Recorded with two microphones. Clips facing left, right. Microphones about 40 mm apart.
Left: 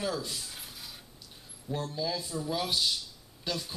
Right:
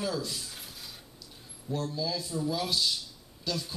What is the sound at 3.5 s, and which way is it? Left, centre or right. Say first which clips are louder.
Speech: right 1 dB; left.